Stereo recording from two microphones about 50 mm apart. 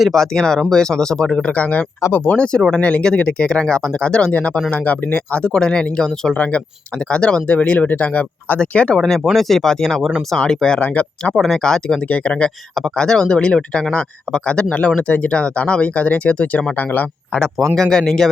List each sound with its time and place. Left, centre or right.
0.1 s speech: centre; by 2.4 s left
2.7 s speech: left
4.3 s speech: left; by 6.3 s centre
6.3 s speech: left
9.0 s speech: centre
10.8 s speech: left
11.3 s speech: centre
11.6 s speech: centre
12.0 s speech: left
16.7 s speech: left
17.7 s speech: centre